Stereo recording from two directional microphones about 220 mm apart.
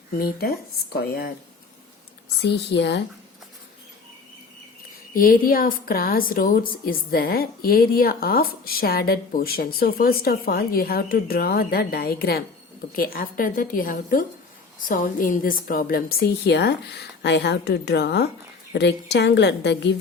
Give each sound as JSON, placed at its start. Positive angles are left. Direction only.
{"t": 0.1, "sound": "a woman's voice", "side_deg": 45}
{"t": 2.4, "sound": "a woman's voice", "side_deg": 50}
{"t": 5.1, "sound": "a woman's voice", "side_deg": 40}